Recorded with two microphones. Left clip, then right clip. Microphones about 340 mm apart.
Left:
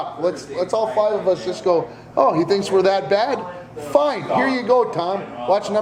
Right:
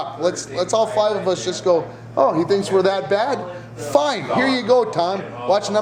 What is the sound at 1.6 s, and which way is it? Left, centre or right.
A man's voice, centre.